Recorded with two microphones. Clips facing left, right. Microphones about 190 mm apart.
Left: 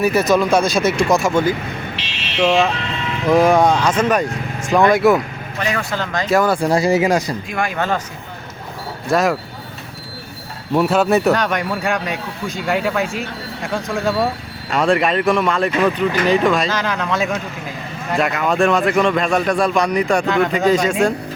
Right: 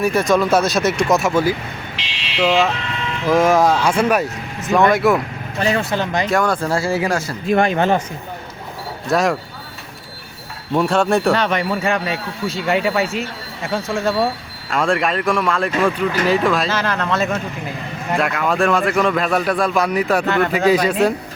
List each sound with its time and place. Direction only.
0.0 s a man's voice: centre (ahead or behind)
5.5 s speech: 30° right (ahead or behind)
5.9 s speech: 20° right (ahead or behind)
6.3 s a man's voice: 5° left (ahead or behind)
6.6 s speech: 15° left (ahead or behind)
7.4 s speech: 30° right (ahead or behind)
9.0 s a man's voice: centre (ahead or behind)
10.8 s a man's voice: 5° left (ahead or behind)